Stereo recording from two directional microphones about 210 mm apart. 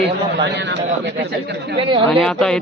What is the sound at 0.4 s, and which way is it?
Speech, 55° right (ahead or behind).